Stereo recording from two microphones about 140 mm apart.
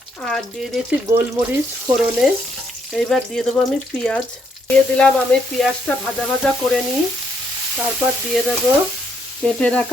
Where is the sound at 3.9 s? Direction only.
10° left (ahead or behind).